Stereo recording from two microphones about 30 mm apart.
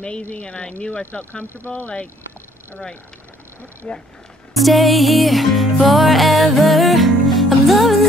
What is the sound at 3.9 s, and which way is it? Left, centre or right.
Speech, left.